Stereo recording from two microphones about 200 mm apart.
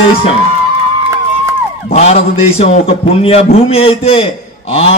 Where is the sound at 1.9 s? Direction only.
35° left (ahead or behind).